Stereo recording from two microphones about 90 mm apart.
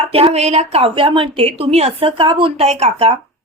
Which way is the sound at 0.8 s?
75° right (ahead or behind).